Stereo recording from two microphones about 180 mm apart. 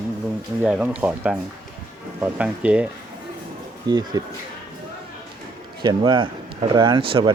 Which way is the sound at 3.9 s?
25° right (ahead or behind).